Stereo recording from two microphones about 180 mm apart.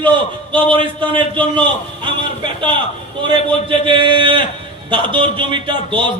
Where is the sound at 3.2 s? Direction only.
25° right (ahead or behind).